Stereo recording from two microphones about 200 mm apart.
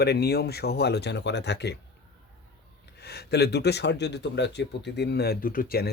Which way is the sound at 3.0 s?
55° left (ahead or behind).